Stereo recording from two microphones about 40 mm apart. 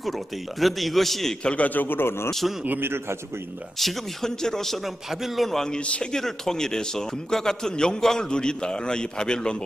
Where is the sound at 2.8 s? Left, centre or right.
Right.